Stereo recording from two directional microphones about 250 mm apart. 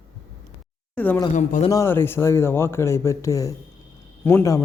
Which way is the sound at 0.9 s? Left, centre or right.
Centre.